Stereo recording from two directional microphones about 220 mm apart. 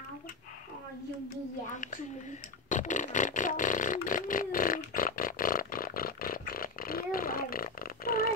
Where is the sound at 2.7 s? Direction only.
35° left (ahead or behind).